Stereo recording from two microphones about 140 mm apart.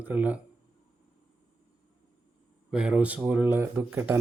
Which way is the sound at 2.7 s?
5° right (ahead or behind).